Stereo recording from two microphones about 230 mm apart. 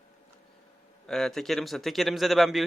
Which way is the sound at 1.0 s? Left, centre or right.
Centre.